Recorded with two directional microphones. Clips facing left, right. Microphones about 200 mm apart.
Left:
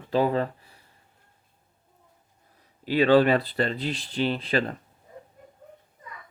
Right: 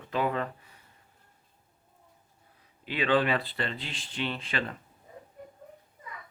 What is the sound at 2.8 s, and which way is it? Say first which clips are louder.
Speech: left 8 dB; 40° left (ahead or behind).